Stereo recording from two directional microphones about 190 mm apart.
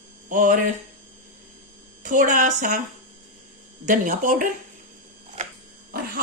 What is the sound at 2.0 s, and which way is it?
Speech, 45° right (ahead or behind).